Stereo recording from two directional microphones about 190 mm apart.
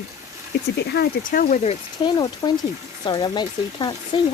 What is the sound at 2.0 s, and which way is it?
Speech, 20° left (ahead or behind).